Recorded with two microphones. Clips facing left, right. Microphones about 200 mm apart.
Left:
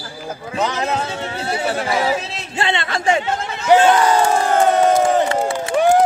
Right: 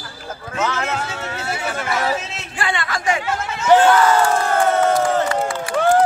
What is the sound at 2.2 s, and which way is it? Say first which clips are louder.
Chatter: left 3 dB; 35° left (ahead or behind).